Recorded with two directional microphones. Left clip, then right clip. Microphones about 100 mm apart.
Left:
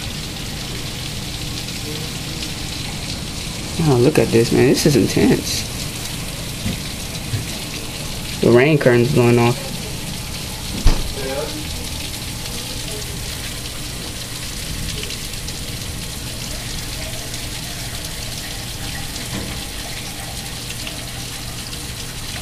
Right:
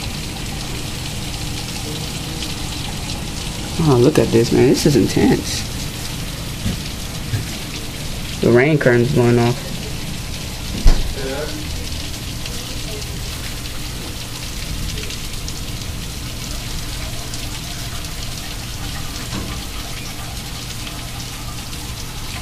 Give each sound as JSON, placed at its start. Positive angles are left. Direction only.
{"t": 3.8, "sound": "speech", "side_deg": 15}
{"t": 8.5, "sound": "speech", "side_deg": 20}